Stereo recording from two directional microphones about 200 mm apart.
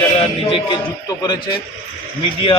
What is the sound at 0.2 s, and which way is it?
Speech, 25° left (ahead or behind).